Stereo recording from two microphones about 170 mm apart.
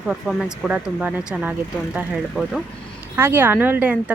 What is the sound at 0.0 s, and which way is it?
Speech, 5° right (ahead or behind).